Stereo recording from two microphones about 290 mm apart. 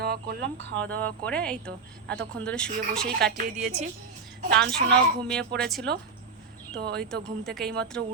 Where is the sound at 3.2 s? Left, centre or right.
Right.